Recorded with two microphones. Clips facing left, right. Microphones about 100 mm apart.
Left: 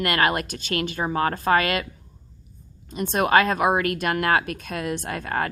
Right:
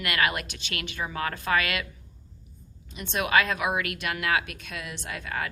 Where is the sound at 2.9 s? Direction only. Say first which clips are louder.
Left 5 dB; 40° left (ahead or behind).